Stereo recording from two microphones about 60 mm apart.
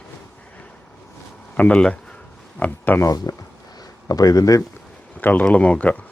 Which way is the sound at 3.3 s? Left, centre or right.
Left.